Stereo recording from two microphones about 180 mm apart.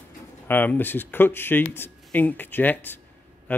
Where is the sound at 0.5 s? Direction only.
10° left (ahead or behind).